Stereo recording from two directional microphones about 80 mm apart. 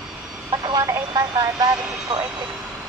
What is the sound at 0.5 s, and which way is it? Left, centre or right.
Speech, right.